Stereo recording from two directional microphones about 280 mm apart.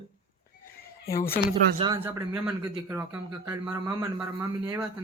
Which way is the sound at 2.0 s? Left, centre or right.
Centre.